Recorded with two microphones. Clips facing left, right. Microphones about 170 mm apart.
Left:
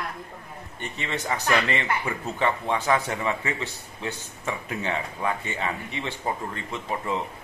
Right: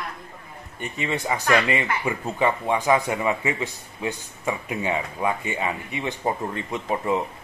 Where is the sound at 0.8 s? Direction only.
10° right (ahead or behind).